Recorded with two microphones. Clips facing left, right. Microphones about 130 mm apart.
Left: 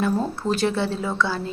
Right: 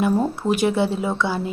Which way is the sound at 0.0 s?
15° right (ahead or behind).